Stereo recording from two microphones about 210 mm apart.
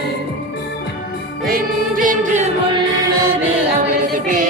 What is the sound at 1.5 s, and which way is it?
Music, 40° right (ahead or behind).